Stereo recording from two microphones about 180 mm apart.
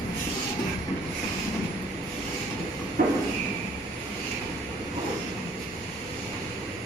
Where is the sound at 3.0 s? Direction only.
55° right (ahead or behind).